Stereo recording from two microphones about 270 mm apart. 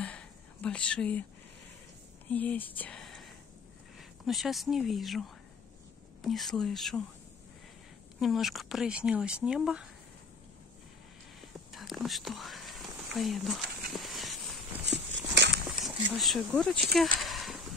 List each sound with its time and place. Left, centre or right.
0.0 s whispering: centre
2.2 s speech: centre
4.3 s speech: centre
8.2 s speech: centre
11.7 s whispering: centre
14.9 s dog: right
15.5 s speech: centre
17.2 s a sound: centre